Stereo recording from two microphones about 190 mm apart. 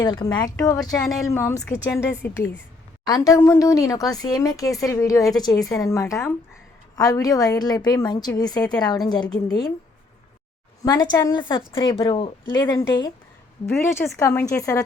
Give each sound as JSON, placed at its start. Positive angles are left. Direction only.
{"t": 0.0, "sound": "a woman's voice", "side_deg": 25}
{"t": 0.8, "sound": "speech", "side_deg": 0}
{"t": 1.3, "sound": "a woman's voice", "side_deg": 15}
{"t": 10.8, "sound": "a woman's voice", "side_deg": 20}